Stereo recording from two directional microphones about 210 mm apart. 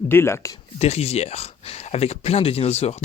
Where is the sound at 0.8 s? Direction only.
30° left (ahead or behind).